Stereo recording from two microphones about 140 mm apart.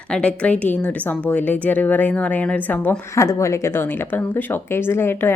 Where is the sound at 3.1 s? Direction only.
20° left (ahead or behind).